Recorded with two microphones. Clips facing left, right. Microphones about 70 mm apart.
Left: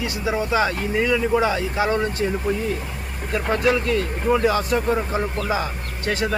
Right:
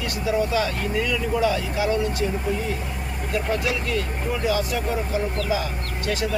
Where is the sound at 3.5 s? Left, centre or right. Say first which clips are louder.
Left 7 dB; left.